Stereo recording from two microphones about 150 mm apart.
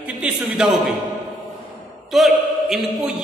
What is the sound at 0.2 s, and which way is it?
Speech, 5° right (ahead or behind).